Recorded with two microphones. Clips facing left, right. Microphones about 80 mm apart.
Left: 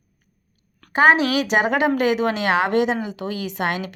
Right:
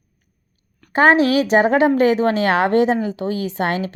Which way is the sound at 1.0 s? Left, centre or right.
Right.